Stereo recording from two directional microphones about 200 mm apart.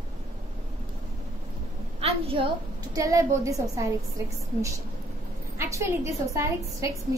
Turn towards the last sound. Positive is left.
turn(degrees=-15)  # may be behind; listen again after turning